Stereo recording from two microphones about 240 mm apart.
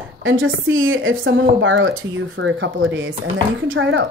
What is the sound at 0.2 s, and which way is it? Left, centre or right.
A woman's voice, right.